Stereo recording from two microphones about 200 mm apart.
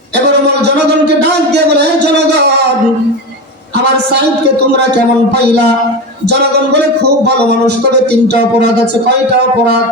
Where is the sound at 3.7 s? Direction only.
55° right (ahead or behind).